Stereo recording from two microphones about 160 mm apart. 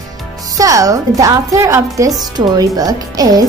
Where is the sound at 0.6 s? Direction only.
20° right (ahead or behind).